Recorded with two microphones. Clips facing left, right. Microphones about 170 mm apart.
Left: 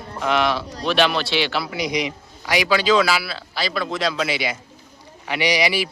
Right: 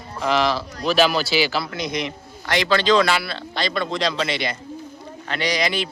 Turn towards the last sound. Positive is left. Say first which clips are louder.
# left 2 dB
turn(degrees=10)  # may be behind; listen again after turning